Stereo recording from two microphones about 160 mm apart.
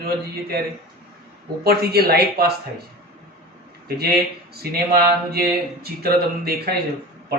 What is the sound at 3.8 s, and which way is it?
Speech, 75° right (ahead or behind).